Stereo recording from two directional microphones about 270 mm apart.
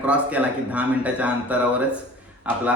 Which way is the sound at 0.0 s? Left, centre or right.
Centre.